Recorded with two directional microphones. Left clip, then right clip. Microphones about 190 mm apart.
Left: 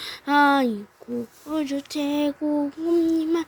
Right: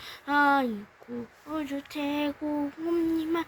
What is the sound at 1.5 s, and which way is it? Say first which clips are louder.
Child singing: left 6 dB; 35° left (ahead or behind).